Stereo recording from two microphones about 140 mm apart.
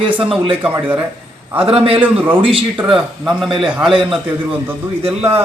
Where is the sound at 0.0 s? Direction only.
40° right (ahead or behind).